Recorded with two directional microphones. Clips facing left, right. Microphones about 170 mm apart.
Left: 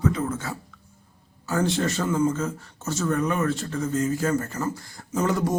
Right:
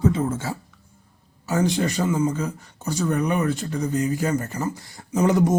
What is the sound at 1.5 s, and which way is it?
Speech, 15° right (ahead or behind).